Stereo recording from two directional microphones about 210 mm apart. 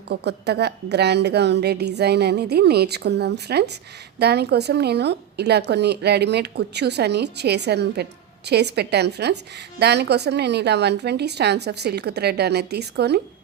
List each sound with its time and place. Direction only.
0.1 s a woman's voice: 50° right (ahead or behind)